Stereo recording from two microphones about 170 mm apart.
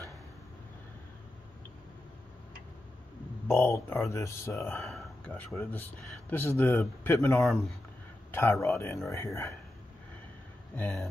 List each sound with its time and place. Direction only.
3.4 s speech: 15° left (ahead or behind)
4.8 s speech: 5° left (ahead or behind)
10.8 s speech: 10° left (ahead or behind)